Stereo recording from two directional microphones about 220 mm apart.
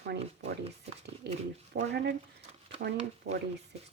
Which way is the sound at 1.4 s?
30° right (ahead or behind).